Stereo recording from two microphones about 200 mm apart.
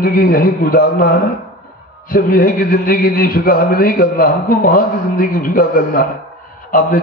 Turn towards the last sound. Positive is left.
turn(degrees=40)  # may be behind; listen again after turning